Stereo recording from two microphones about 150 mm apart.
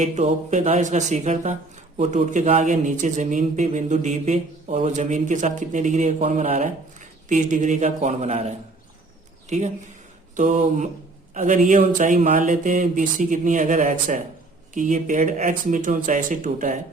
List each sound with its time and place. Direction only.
0.0 s a man's voice: 50° right (ahead or behind)